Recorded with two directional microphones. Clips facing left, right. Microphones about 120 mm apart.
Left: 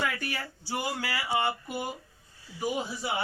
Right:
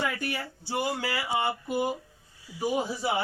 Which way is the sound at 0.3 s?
25° right (ahead or behind).